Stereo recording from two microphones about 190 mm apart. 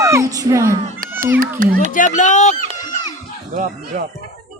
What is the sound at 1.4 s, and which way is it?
Speech, 45° right (ahead or behind).